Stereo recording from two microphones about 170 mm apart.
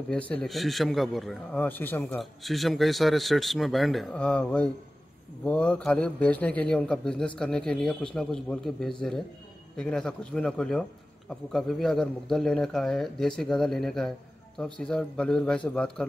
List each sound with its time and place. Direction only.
0.1 s a man's voice: 5° left (ahead or behind)